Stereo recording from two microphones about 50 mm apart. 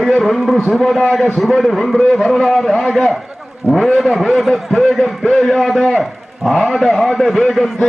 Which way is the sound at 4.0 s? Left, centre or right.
Centre.